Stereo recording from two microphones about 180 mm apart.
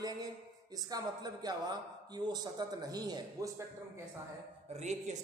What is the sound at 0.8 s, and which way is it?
Speech, 20° right (ahead or behind).